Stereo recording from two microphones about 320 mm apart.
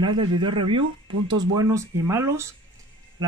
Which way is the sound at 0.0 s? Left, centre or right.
Centre.